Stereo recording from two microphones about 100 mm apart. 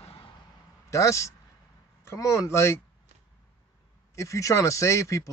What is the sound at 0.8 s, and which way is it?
A man's voice, 30° left (ahead or behind).